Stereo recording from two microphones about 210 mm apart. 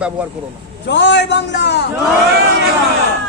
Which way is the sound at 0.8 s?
55° left (ahead or behind).